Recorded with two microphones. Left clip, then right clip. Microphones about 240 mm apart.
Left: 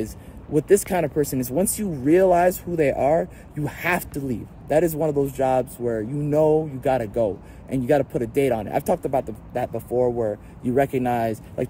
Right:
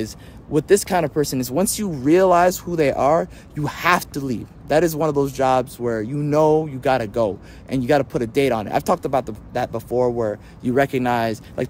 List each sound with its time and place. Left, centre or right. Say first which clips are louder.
0.6 s speech: right 2 dB; centre; by 10.2 s right
10.2 s speech: right 2 dB; centre